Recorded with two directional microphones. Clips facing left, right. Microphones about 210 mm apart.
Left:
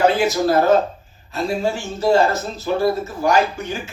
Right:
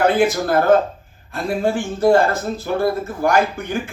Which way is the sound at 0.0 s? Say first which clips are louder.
Even; 55° right (ahead or behind).